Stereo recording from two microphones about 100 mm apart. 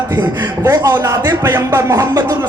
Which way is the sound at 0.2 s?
35° right (ahead or behind).